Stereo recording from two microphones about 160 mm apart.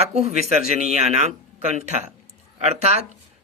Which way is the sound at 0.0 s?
45° right (ahead or behind).